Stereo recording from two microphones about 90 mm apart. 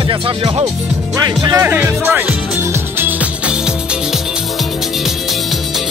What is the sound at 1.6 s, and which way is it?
Speech, 20° right (ahead or behind).